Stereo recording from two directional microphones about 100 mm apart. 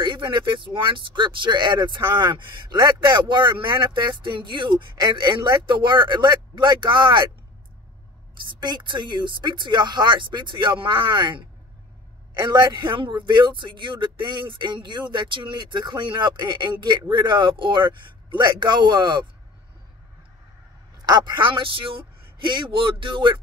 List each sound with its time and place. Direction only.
0.0 s speech: 55° right (ahead or behind)
8.5 s speech: 45° right (ahead or behind)
21.0 s speech: 45° right (ahead or behind)